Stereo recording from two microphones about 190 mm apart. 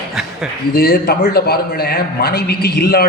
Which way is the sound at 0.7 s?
55° left (ahead or behind).